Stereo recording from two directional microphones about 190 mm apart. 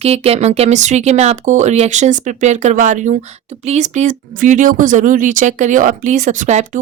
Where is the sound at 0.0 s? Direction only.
30° right (ahead or behind).